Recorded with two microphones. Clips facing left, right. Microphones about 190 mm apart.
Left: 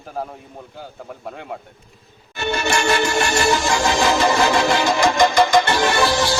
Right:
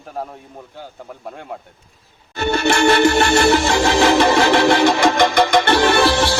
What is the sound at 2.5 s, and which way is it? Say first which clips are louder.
Music: right 5 dB; 60° right (ahead or behind).